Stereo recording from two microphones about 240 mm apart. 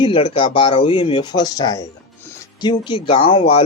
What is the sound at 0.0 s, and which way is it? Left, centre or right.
Speech, left.